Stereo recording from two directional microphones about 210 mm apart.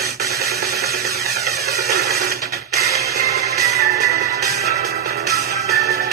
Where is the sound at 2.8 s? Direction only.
50° right (ahead or behind).